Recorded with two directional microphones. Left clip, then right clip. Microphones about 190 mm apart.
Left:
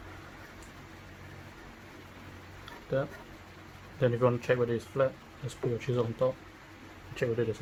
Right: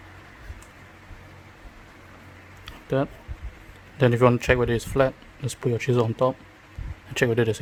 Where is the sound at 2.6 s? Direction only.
70° right (ahead or behind).